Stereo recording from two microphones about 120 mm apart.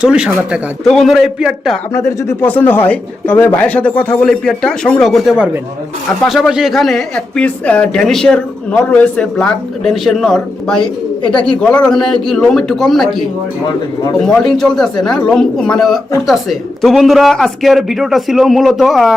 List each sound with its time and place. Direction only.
0.0 s a man's voice: 10° right (ahead or behind)
1.9 s a man's voice: 25° left (ahead or behind); by 10.8 s centre (ahead or behind)
11.3 s speech: 40° left (ahead or behind)
11.6 s a man's voice: 10° left (ahead or behind)